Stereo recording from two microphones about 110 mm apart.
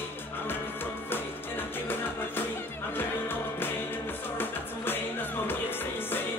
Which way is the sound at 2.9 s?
20° left (ahead or behind).